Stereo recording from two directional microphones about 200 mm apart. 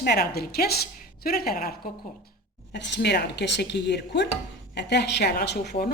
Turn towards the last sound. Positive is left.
turn(degrees=55)  # may be behind; listen again after turning